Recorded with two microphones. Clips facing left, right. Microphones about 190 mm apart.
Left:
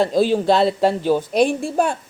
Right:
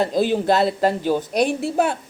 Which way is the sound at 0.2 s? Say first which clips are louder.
Left 2 dB; 50° right (ahead or behind).